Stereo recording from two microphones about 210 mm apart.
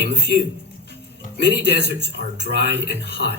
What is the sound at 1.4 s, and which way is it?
A man's voice, 55° right (ahead or behind).